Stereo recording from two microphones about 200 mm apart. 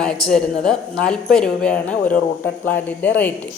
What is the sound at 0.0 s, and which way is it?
A man's voice, 5° left (ahead or behind).